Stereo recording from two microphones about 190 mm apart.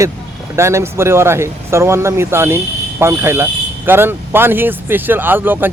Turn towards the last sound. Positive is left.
turn(degrees=-10)  # may be behind; listen again after turning